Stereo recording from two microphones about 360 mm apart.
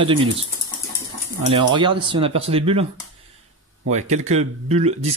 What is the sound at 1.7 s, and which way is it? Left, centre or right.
Speech, centre.